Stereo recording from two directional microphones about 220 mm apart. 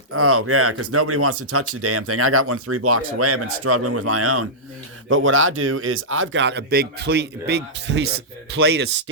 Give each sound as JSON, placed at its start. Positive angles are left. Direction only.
{"t": 0.1, "sound": "speech", "side_deg": -80}
{"t": 5.0, "sound": "speech", "side_deg": -65}